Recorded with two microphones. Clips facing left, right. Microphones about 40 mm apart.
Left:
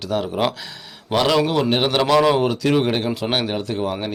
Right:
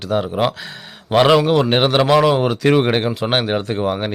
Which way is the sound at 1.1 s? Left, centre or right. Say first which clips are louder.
Right 5 dB; right.